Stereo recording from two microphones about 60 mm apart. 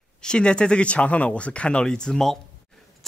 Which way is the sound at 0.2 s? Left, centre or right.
Centre.